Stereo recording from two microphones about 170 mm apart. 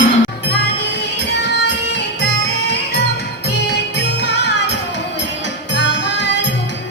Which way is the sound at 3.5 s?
80° left.